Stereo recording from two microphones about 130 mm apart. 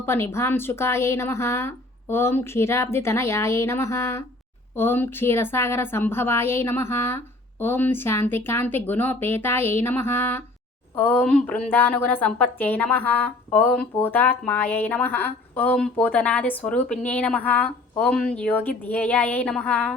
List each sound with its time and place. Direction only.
0.0 s a woman's voice: 20° left (ahead or behind)